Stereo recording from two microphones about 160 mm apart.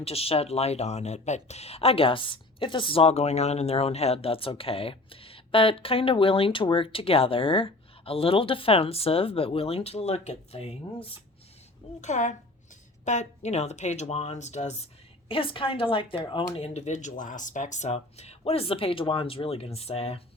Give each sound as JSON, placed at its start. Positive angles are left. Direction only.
{"t": 0.0, "sound": "speech", "side_deg": 40}
{"t": 11.9, "sound": "speech", "side_deg": 50}
{"t": 15.3, "sound": "speech", "side_deg": 35}